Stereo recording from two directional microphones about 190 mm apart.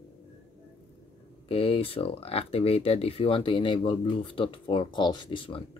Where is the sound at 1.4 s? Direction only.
30° left (ahead or behind).